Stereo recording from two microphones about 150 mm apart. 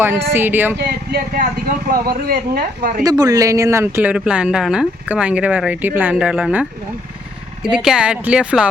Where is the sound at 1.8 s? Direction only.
80° right.